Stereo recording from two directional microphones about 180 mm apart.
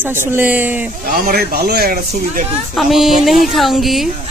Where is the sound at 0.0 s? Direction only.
10° right (ahead or behind).